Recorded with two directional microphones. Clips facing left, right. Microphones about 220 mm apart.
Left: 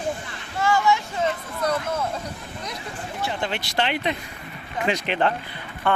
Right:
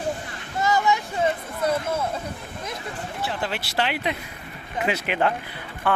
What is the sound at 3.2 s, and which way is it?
Speech, 5° right (ahead or behind).